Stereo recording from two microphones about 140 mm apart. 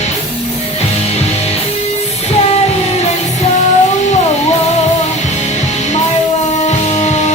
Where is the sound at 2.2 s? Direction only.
50° left (ahead or behind).